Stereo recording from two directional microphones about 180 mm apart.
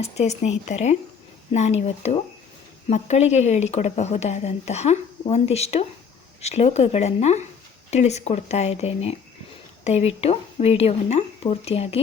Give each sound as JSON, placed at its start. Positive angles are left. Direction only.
{"t": 0.0, "sound": "speech", "side_deg": 40}